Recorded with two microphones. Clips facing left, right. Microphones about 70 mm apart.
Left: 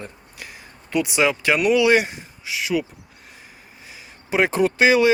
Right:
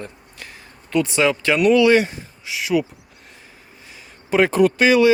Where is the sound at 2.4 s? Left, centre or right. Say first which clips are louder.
Right 3 dB; centre.